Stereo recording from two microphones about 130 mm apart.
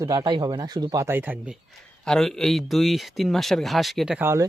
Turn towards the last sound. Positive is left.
turn(degrees=-20)  # may be behind; listen again after turning